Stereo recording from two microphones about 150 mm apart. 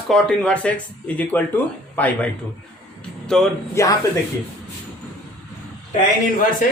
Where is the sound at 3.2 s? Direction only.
5° left (ahead or behind).